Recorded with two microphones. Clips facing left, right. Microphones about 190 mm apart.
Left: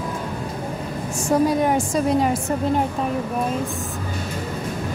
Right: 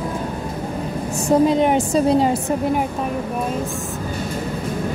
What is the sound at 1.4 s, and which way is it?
Speech, 20° right (ahead or behind).